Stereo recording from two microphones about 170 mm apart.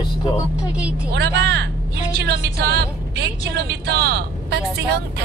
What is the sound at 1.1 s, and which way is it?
A woman's voice, 75° right (ahead or behind).